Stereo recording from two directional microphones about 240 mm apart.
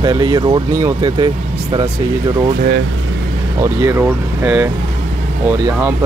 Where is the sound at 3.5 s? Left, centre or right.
Centre.